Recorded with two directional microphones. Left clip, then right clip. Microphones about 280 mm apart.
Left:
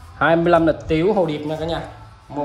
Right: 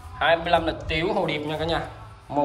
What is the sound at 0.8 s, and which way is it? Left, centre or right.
Speech, left.